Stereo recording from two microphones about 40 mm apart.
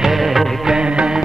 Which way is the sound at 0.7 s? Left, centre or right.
Right.